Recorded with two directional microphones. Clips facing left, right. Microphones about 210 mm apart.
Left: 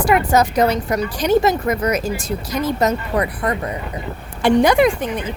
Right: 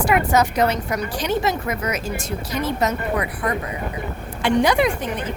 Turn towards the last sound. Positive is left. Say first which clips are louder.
# left 4 dB
turn(degrees=50)  # may be behind; listen again after turning